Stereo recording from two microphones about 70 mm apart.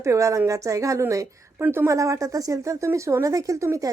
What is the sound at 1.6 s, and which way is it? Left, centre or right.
Speech, right.